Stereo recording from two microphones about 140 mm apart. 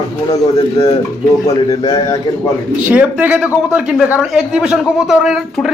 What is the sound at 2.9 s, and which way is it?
A man's voice, 10° right (ahead or behind).